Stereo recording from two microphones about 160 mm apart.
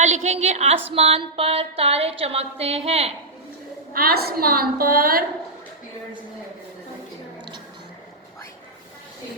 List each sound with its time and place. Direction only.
0.0 s a woman's voice: 45° right (ahead or behind)
0.9 s a sound: 40° right (ahead or behind)
3.9 s a woman's voice: 70° right (ahead or behind)